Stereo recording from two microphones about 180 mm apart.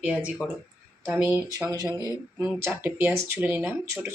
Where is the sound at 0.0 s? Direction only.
10° right (ahead or behind).